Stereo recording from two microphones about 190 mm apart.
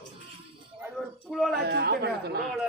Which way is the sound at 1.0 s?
5° right (ahead or behind).